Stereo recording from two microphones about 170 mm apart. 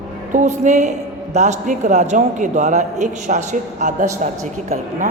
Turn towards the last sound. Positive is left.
turn(degrees=-45)  # may be behind; listen again after turning